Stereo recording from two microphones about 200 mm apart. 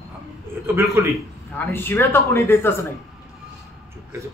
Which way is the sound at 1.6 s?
10° left (ahead or behind).